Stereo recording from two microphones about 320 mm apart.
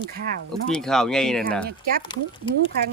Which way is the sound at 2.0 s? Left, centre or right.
Centre.